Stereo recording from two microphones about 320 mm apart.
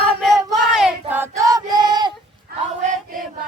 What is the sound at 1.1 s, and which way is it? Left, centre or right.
Female singing, centre.